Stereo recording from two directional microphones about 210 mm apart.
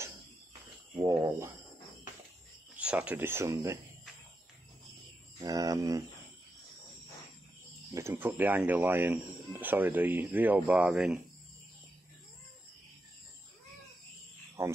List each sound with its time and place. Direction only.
0.9 s a sound: 15° right (ahead or behind)
2.8 s speech: 5° right (ahead or behind)
5.4 s speech: 15° right (ahead or behind)
7.9 s speech: 10° right (ahead or behind)
14.6 s speech: 10° right (ahead or behind)